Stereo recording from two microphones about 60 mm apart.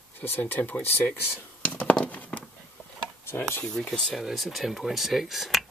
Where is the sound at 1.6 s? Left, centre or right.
Centre.